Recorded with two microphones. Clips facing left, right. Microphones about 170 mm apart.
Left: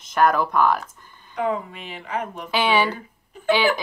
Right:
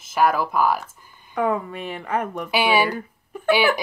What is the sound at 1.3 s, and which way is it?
Speech, 55° right (ahead or behind).